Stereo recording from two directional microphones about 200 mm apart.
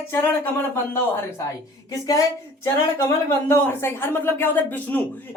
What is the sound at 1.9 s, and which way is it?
Speech, 15° left (ahead or behind).